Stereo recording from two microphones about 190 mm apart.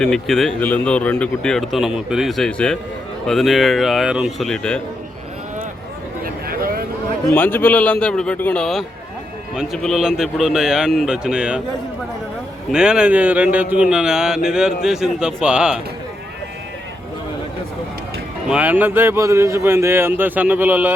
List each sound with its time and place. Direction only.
0.0 s speech: centre (ahead or behind)
6.2 s a sound: 50° right (ahead or behind)
7.3 s a man's voice: 10° left (ahead or behind)
12.7 s a man's voice: 5° right (ahead or behind)
18.4 s a man's voice: 5° right (ahead or behind)